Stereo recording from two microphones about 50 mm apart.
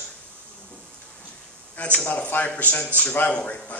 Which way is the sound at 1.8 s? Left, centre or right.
Left.